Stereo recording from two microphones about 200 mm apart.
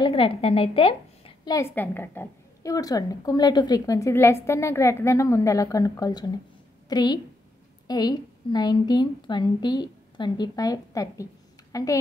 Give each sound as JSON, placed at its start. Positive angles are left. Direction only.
{"t": 0.0, "sound": "a woman's voice", "side_deg": 25}